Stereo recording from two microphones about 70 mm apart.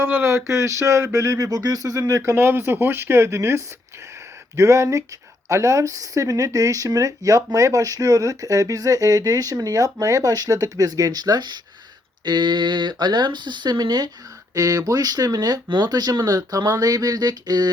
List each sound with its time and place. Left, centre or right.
0.0 s a sound: right
2.2 s speech: right
4.5 s a sound: right
5.5 s speech: right
14.5 s speech: right
16.2 s speech: right